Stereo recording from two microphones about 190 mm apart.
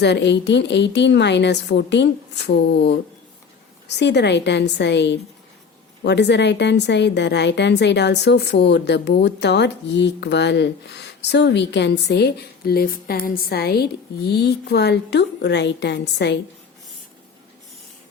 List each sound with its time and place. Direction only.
0.0 s a woman's voice: 65° left (ahead or behind)